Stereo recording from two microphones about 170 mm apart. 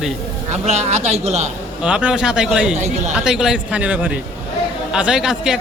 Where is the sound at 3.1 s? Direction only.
5° right (ahead or behind).